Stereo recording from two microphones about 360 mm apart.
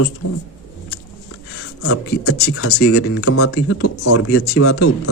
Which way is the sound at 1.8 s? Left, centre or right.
Left.